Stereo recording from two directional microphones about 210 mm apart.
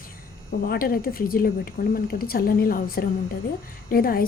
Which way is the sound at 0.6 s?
45° left (ahead or behind).